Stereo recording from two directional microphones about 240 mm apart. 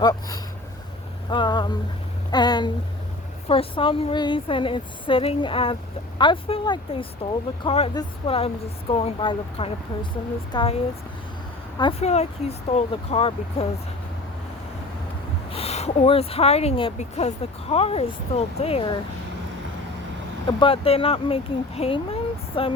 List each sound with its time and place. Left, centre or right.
0.0 s a sound: centre
3.5 s speech: left
11.8 s speech: left
15.5 s speech: left
20.6 s speech: left